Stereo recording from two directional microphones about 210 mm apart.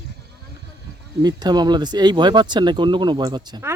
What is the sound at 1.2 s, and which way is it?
Speech, 20° right (ahead or behind).